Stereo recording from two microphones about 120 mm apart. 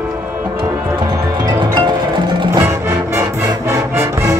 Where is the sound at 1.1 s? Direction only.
35° right (ahead or behind).